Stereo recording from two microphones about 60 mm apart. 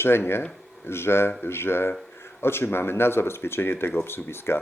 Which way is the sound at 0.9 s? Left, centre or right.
Left.